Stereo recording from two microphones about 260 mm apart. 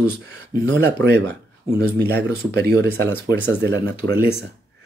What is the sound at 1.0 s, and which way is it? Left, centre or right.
Speech, centre.